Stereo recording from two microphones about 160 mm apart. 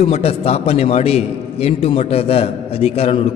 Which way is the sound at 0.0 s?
40° left (ahead or behind).